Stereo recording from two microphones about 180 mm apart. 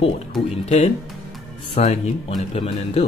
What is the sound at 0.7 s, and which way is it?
Speech, 35° left (ahead or behind).